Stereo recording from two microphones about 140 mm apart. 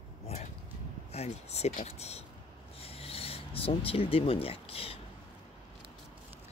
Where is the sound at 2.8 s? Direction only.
45° left (ahead or behind).